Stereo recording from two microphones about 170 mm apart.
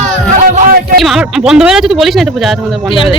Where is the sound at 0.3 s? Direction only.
45° right (ahead or behind).